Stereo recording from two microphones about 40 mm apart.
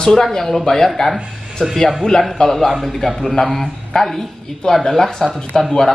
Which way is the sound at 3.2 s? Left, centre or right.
Centre.